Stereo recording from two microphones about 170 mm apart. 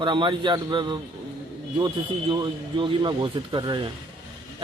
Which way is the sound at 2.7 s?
25° right (ahead or behind).